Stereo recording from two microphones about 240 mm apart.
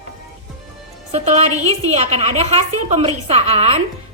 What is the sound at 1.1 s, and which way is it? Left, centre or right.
A woman's voice, right.